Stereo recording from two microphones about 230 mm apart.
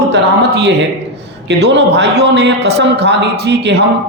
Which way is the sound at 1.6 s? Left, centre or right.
Right.